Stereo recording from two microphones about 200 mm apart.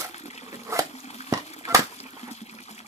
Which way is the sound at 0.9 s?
35° left (ahead or behind).